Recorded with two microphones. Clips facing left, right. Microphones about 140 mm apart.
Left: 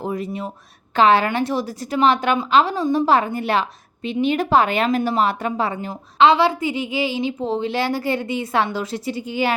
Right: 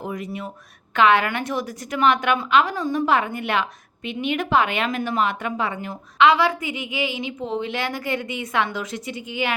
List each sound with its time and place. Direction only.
0.0 s a woman's voice: 30° left (ahead or behind)